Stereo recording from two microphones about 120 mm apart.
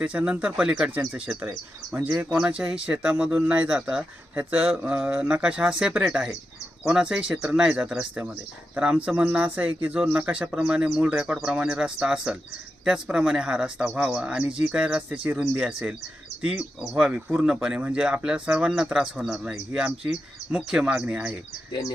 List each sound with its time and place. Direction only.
0.0 s speech: 10° right (ahead or behind)
21.7 s speech: 40° left (ahead or behind)